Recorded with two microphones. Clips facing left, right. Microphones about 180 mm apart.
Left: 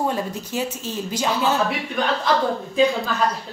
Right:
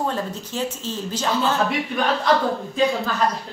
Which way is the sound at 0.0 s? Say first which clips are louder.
Left 1 dB; 10° left (ahead or behind).